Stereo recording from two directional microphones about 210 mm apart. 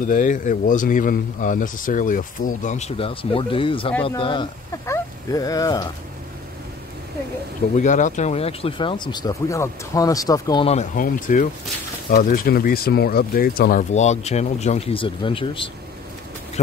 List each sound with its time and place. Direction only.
0.0 s speech: 40° left (ahead or behind); by 5.9 s 15° left (ahead or behind)
7.7 s speech: 35° left (ahead or behind)